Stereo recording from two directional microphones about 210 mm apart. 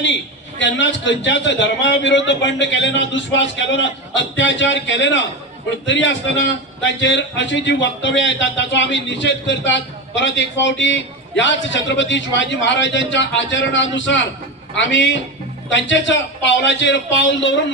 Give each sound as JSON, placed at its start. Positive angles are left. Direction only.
{"t": 0.0, "sound": "a man's voice", "side_deg": 60}